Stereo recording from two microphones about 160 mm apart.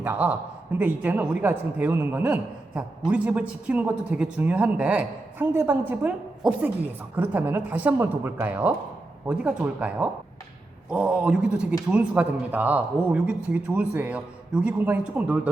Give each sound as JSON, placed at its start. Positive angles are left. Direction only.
{"t": 0.0, "sound": "a woman's voice", "side_deg": -15}